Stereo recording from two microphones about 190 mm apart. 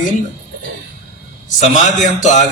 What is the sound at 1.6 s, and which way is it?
Speech, 40° left (ahead or behind).